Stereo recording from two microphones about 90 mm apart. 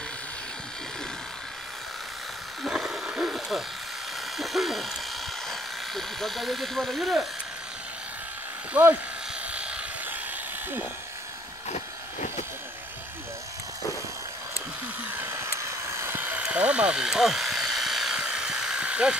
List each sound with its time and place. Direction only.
2.6 s a sound: 5° right (ahead or behind)
4.4 s owl: centre (ahead or behind)
5.5 s speech: centre (ahead or behind)
8.8 s speech: 15° right (ahead or behind)
9.5 s helicopter: 10° right (ahead or behind)
15.0 s a sound: 25° right (ahead or behind)